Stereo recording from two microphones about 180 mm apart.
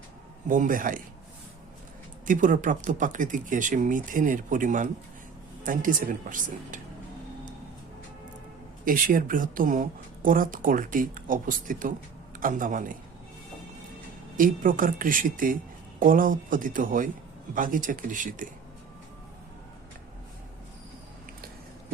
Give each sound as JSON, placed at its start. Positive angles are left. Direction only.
{"t": 0.4, "sound": "speech", "side_deg": -45}
{"t": 2.2, "sound": "speech", "side_deg": -45}
{"t": 8.8, "sound": "speech", "side_deg": -50}
{"t": 14.3, "sound": "speech", "side_deg": -50}